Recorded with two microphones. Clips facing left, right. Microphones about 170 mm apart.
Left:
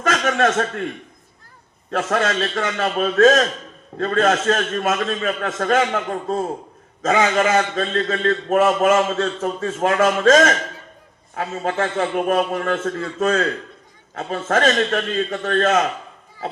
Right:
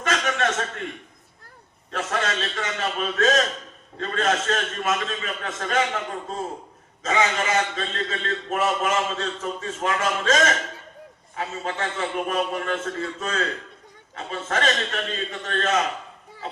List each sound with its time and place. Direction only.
0.1 s chuckle: 45° left (ahead or behind)
1.9 s a man's voice: 45° left (ahead or behind)